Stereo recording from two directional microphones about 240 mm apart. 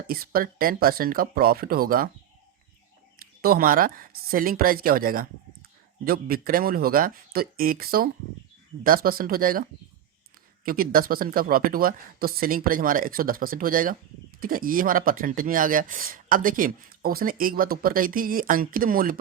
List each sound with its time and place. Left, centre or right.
0.1 s speech: right
3.2 s speech: right
10.7 s speech: right